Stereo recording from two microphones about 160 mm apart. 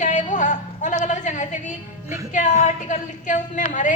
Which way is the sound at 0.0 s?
50° left (ahead or behind).